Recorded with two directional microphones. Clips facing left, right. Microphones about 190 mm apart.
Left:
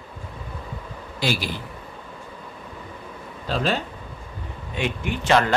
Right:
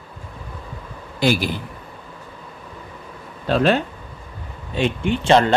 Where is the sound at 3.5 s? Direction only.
60° right (ahead or behind).